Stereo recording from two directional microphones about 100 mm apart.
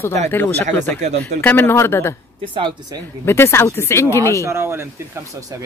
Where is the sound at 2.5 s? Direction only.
55° right (ahead or behind).